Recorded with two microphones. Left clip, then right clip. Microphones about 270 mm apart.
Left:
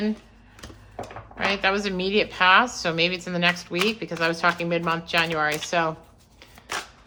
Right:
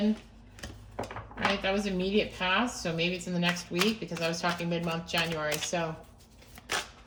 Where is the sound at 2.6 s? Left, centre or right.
Centre.